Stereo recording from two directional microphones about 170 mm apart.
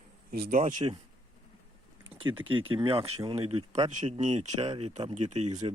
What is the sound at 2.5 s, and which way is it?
Speech, 30° right (ahead or behind).